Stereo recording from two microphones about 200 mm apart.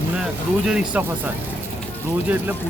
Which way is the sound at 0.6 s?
5° right (ahead or behind).